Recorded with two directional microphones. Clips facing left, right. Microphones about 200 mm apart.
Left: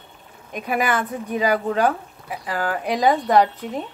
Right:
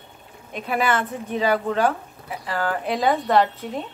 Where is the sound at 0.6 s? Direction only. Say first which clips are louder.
Even; 10° left (ahead or behind).